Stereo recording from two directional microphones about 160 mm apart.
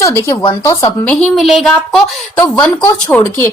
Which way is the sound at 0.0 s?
20° left (ahead or behind).